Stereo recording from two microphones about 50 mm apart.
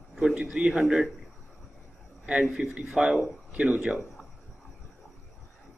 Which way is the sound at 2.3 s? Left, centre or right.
Right.